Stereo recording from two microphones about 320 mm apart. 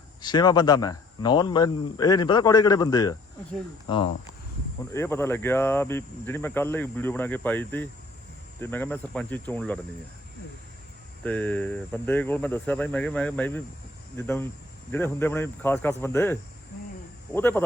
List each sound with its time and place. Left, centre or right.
0.2 s speech: centre
11.2 s speech: centre